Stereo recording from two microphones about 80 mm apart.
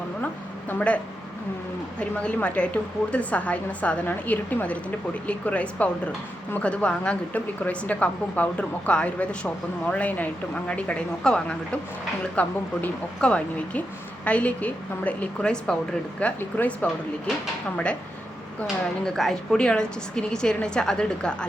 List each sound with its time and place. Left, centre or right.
0.7 s a sound: centre
2.0 s a woman's voice: centre
19.0 s a woman's voice: centre